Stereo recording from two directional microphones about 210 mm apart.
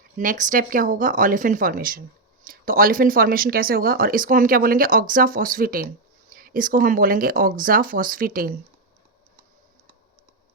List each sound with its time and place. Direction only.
0.2 s speech: 40° right (ahead or behind)